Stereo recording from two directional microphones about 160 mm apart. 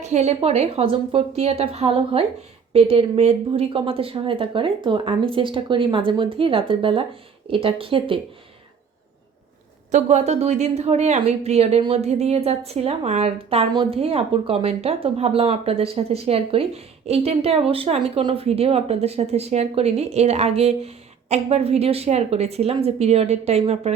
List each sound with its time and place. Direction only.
0.0 s a woman's voice: 45° right (ahead or behind)
9.9 s a woman's voice: 45° right (ahead or behind)